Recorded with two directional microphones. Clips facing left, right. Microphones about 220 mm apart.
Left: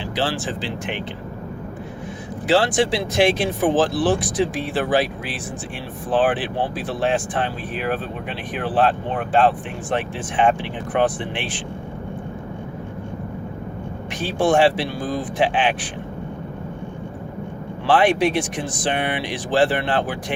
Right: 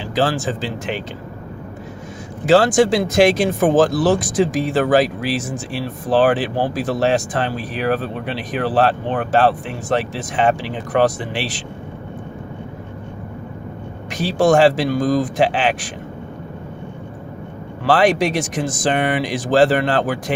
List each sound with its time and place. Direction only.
0.2 s speech: 40° right (ahead or behind)
2.5 s speech: 45° right (ahead or behind)
14.1 s speech: 40° right (ahead or behind)
17.8 s speech: 40° right (ahead or behind)